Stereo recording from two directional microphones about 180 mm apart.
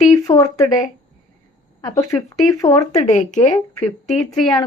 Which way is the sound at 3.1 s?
40° left (ahead or behind).